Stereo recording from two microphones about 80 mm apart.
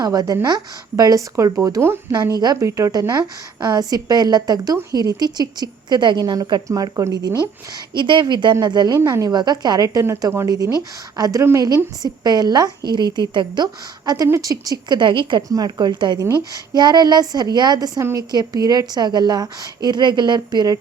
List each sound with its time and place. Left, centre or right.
0.0 s speech: right
1.8 s speech: right
2.2 s a woman's voice: right
2.6 s speech: right
3.2 s a woman's voice: right
6.9 s speech: right
7.9 s a woman's voice: right
8.9 s speech: right
9.3 s a woman's voice: right
10.0 s a woman's voice: right
14.0 s a woman's voice: right
15.4 s a woman's voice: right